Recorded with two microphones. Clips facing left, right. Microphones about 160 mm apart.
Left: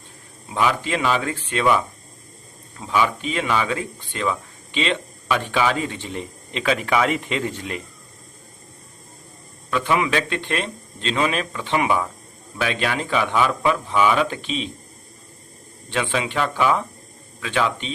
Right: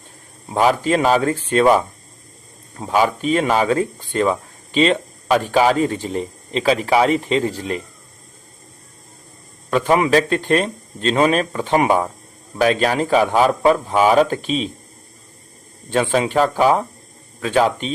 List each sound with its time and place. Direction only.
0.4 s speech: 40° right (ahead or behind)
9.6 s speech: 40° right (ahead or behind)
15.9 s speech: 40° right (ahead or behind)